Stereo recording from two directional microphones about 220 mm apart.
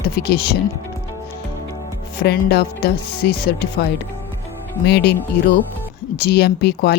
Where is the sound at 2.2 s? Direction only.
50° left (ahead or behind).